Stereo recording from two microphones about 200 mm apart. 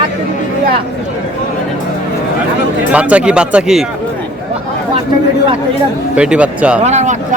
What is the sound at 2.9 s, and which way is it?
Speech, 5° right (ahead or behind).